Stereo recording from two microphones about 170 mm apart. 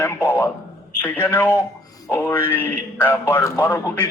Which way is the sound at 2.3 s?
10° left (ahead or behind).